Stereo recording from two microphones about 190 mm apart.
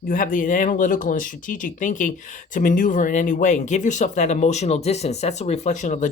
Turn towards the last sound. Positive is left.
turn(degrees=40)  # may be behind; listen again after turning